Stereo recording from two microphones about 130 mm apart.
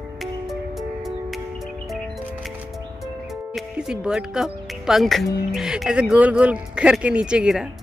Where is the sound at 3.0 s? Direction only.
Centre (ahead or behind).